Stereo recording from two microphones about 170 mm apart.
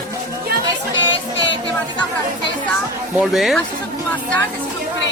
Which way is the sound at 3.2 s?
Centre (ahead or behind).